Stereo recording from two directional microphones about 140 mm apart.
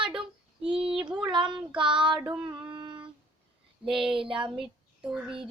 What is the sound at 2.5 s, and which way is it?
Music, 35° right (ahead or behind).